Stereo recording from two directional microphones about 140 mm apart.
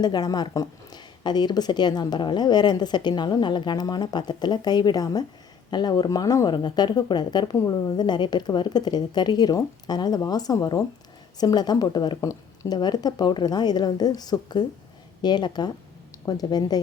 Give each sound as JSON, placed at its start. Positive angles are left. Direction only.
{"t": 0.0, "sound": "speech", "side_deg": 30}